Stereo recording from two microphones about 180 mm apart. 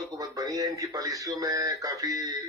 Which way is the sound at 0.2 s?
20° right (ahead or behind).